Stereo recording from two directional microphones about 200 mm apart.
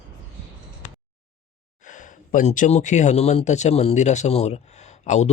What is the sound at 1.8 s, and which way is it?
A man's voice, 40° left (ahead or behind).